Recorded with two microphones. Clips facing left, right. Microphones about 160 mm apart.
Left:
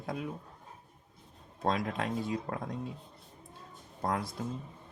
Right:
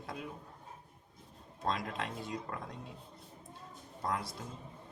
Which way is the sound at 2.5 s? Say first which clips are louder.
Left 5 dB; 45° left (ahead or behind).